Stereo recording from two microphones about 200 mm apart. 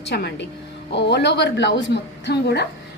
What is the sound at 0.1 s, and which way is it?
A woman's voice, 55° left (ahead or behind).